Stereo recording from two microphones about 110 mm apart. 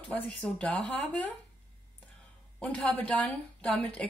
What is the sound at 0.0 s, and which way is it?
Speech, 10° left (ahead or behind).